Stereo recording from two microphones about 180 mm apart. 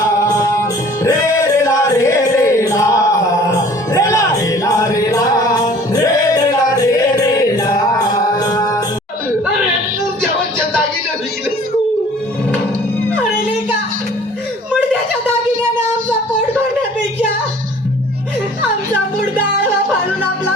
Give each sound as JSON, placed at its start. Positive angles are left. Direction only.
{"t": 0.0, "sound": "music", "side_deg": 15}